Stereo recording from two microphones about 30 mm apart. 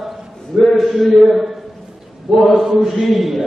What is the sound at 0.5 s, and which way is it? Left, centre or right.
Speech, centre.